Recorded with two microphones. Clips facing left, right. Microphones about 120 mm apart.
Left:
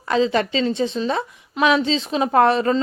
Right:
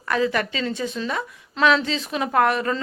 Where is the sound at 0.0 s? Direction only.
25° left (ahead or behind).